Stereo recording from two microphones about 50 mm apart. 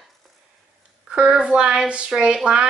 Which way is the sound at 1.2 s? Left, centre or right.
Centre.